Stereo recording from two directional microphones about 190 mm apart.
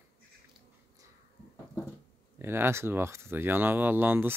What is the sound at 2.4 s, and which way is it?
Speech, 10° right (ahead or behind).